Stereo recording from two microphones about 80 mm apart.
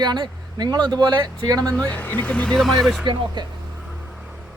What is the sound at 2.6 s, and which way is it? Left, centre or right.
Speech, centre.